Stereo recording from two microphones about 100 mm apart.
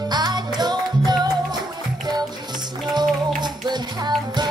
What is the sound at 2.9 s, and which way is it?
Music, 45° right (ahead or behind).